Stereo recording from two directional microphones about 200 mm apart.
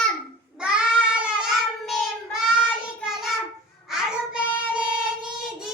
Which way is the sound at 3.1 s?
Centre (ahead or behind).